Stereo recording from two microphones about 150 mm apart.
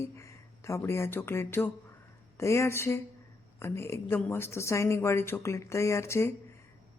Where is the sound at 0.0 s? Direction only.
20° left (ahead or behind).